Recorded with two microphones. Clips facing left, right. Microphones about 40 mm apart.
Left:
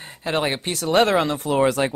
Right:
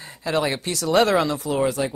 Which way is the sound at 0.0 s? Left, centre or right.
Left.